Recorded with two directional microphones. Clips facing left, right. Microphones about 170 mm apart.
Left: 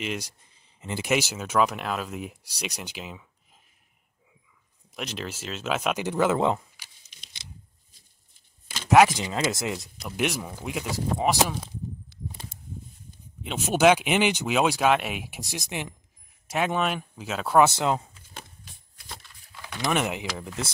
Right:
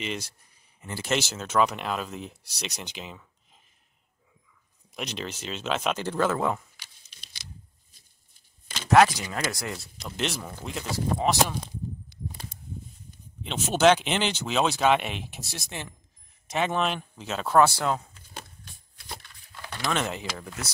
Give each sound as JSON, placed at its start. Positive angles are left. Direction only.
{"t": 0.0, "sound": "speech", "side_deg": 10}
{"t": 4.9, "sound": "speech", "side_deg": 0}
{"t": 7.1, "sound": "a sound", "side_deg": 20}
{"t": 8.8, "sound": "speech", "side_deg": 10}
{"t": 9.1, "sound": "speech", "side_deg": 20}
{"t": 13.4, "sound": "speech", "side_deg": 5}
{"t": 17.6, "sound": "speech", "side_deg": 20}
{"t": 19.2, "sound": "a sound", "side_deg": 5}
{"t": 19.8, "sound": "speech", "side_deg": 15}